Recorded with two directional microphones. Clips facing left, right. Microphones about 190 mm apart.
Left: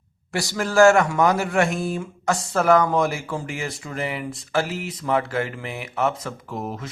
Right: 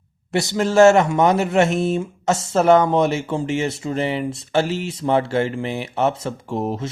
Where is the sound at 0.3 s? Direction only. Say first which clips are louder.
Right 6 dB; 25° right (ahead or behind).